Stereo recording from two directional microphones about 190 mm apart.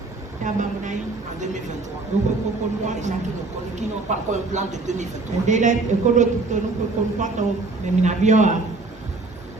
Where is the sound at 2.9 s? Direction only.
40° right (ahead or behind).